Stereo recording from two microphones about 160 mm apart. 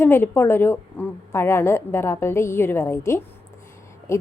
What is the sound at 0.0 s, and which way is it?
A woman's voice, 15° left (ahead or behind).